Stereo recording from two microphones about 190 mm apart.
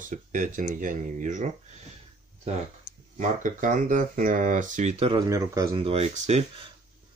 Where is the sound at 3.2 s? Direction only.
45° right (ahead or behind); by 5.6 s 20° right (ahead or behind).